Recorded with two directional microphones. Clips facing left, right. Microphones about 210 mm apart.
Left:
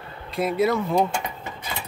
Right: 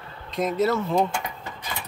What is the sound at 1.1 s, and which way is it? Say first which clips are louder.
Mechanisms: left 2 dB; 20° left (ahead or behind).